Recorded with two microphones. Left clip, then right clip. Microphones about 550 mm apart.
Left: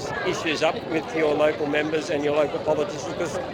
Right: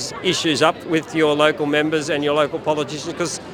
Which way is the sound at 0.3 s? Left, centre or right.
Right.